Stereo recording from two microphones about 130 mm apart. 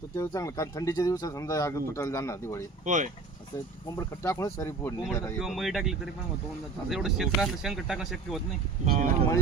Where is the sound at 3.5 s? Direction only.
20° left (ahead or behind).